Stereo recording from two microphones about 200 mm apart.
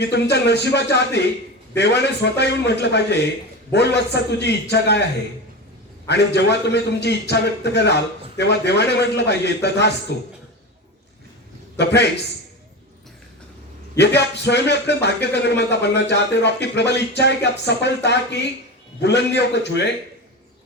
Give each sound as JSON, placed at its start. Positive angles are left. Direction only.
{"t": 0.0, "sound": "speech", "side_deg": 60}
{"t": 6.1, "sound": "speech", "side_deg": 60}
{"t": 11.8, "sound": "speech", "side_deg": 60}
{"t": 14.0, "sound": "speech", "side_deg": 60}